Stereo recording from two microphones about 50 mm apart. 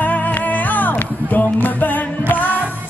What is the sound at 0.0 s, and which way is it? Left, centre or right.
Music, left.